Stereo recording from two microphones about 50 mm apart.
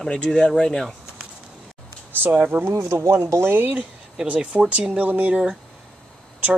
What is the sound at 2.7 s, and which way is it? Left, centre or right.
Speech, right.